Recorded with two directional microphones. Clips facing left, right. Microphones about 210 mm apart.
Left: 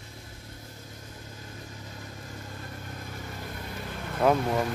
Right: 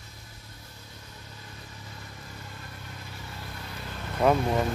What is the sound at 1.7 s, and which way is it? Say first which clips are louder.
Vehicle: left 3 dB; 25° left (ahead or behind).